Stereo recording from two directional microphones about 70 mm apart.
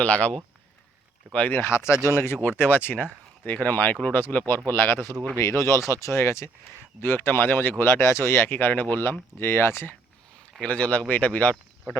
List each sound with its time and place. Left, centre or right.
0.0 s speech: centre; by 9.9 s left
10.6 s speech: left